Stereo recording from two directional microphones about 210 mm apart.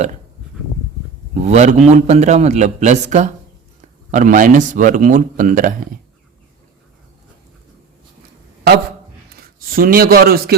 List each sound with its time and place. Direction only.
1.3 s speech: 35° right (ahead or behind)
9.3 s a man's voice: 45° right (ahead or behind)